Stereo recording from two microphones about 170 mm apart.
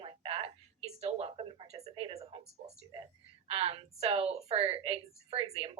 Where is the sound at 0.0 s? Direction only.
30° right (ahead or behind).